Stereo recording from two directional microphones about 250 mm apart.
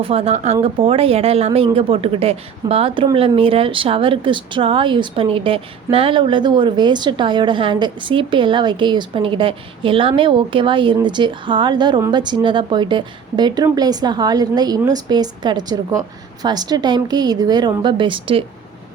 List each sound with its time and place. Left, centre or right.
0.0 s a woman's voice: right